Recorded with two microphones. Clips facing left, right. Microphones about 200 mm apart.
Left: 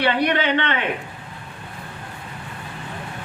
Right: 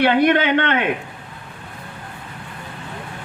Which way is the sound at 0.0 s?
50° right (ahead or behind).